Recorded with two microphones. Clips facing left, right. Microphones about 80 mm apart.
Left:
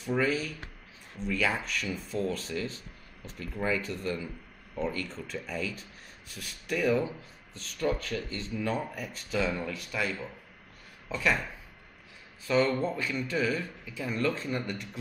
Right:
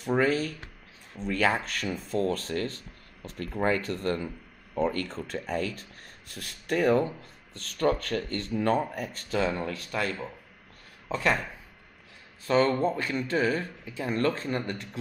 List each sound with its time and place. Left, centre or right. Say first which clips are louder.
0.0 s a man's voice: right 4 dB; right
12.4 s a man's voice: right 3 dB; right